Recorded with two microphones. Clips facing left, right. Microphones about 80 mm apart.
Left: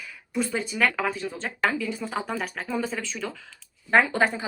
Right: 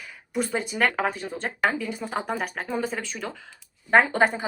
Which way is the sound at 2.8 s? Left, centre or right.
Right.